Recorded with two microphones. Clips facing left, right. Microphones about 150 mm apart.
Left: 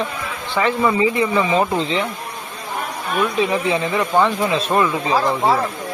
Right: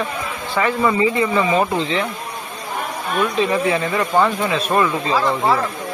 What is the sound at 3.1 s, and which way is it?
Speech, centre (ahead or behind).